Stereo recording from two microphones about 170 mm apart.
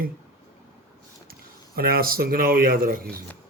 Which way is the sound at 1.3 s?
60° right (ahead or behind).